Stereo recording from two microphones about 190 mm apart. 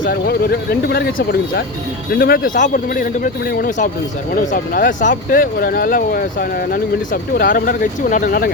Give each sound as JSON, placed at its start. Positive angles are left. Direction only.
{"t": 0.0, "sound": "speech", "side_deg": 50}